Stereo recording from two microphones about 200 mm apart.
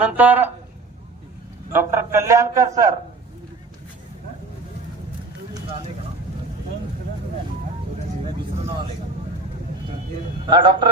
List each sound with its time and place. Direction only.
0.0 s a man's voice: 10° right (ahead or behind)
1.7 s a man's voice: 10° right (ahead or behind)
10.5 s a man's voice: 25° right (ahead or behind)